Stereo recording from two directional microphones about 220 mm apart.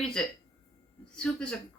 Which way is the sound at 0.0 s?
5° left (ahead or behind).